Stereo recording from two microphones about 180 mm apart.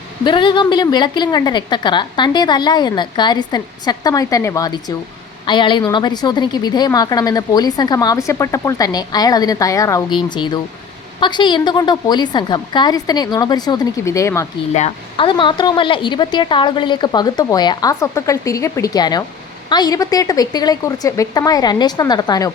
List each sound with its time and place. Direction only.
0.3 s a woman's voice: 25° left (ahead or behind)
14.7 s a woman's voice: 35° left (ahead or behind); by 22.5 s 20° left (ahead or behind)